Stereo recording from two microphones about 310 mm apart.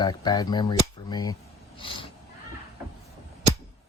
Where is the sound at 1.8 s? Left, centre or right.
Centre.